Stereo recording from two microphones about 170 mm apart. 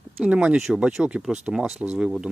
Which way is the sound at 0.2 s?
5° right (ahead or behind).